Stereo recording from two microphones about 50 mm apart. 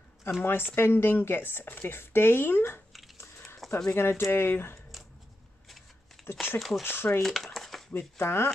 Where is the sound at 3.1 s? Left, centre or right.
Left.